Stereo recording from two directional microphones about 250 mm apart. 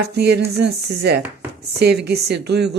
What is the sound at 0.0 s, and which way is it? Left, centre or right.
A woman's voice, right.